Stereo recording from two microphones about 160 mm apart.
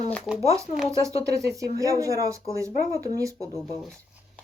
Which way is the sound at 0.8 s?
40° left (ahead or behind).